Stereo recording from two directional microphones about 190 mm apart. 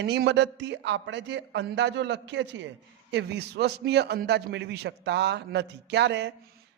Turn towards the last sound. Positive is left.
turn(degrees=-65)  # may be behind; listen again after turning